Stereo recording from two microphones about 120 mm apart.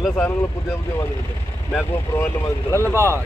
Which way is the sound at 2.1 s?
20° left (ahead or behind).